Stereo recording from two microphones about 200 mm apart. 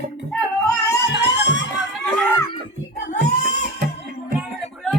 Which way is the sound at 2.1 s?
10° left (ahead or behind).